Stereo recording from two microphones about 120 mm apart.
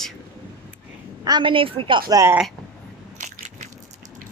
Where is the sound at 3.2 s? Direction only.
75° right (ahead or behind).